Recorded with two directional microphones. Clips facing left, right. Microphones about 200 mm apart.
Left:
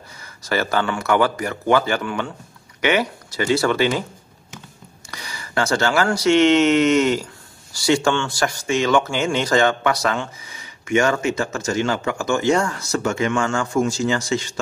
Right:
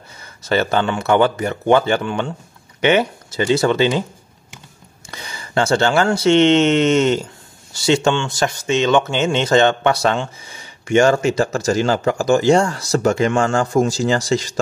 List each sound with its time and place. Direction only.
0.2 s speech: 25° right (ahead or behind)
5.1 s a man's voice: 25° right (ahead or behind)